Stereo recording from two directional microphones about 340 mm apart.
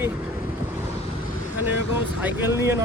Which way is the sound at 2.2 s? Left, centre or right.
Centre.